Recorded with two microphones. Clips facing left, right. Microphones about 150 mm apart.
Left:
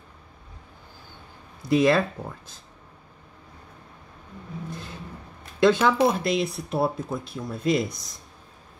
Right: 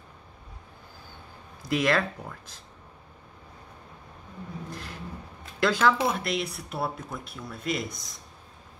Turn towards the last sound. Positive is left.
turn(degrees=25)  # may be behind; listen again after turning